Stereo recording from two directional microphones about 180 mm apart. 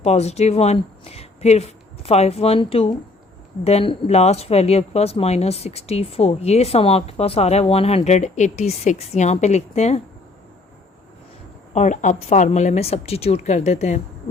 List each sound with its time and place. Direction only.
0.0 s speech: 35° left (ahead or behind)
11.7 s speech: 40° left (ahead or behind)